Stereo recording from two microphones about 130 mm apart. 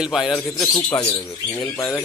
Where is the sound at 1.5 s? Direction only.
25° left (ahead or behind).